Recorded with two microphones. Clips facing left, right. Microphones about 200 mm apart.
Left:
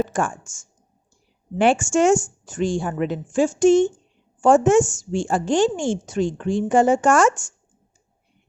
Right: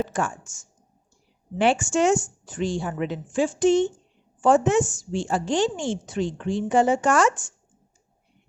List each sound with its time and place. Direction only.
0.1 s a woman's voice: 50° left (ahead or behind)